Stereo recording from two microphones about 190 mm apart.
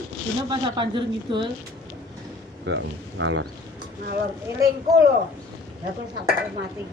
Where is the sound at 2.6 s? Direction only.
85° right.